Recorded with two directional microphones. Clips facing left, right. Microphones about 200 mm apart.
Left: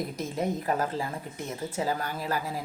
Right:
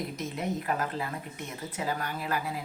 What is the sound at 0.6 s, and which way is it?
Speech, 30° left (ahead or behind).